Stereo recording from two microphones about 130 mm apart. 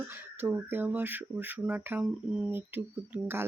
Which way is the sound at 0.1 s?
15° right (ahead or behind).